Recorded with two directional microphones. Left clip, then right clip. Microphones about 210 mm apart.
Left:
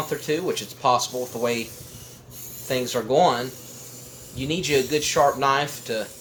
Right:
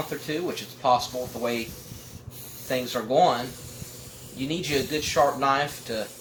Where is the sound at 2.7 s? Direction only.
40° left (ahead or behind).